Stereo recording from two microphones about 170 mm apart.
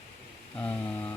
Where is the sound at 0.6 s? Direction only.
10° left (ahead or behind).